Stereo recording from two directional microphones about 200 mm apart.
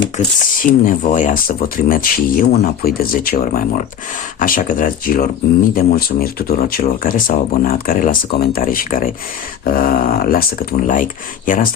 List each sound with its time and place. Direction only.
0.6 s speech: 40° left (ahead or behind)